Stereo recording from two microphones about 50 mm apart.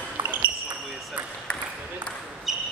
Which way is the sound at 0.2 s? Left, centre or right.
Right.